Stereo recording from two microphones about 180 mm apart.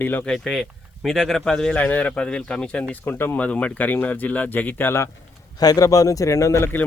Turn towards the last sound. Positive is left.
turn(degrees=15)  # may be behind; listen again after turning